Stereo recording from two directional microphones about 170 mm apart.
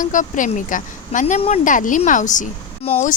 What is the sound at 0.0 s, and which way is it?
Speech, 50° left (ahead or behind).